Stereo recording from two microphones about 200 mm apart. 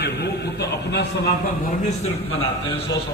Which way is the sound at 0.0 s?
55° left (ahead or behind).